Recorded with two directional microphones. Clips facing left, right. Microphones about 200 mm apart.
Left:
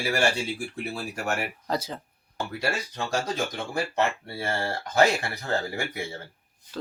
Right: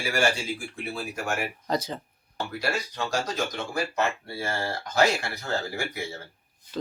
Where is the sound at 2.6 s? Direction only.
30° left (ahead or behind).